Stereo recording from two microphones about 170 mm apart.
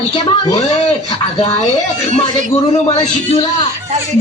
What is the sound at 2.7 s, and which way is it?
Speech, 40° left (ahead or behind).